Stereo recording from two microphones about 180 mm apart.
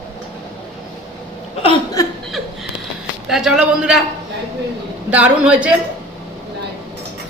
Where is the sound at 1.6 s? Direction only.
20° left (ahead or behind).